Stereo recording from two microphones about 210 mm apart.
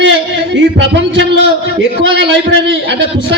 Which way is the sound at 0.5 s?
60° right (ahead or behind).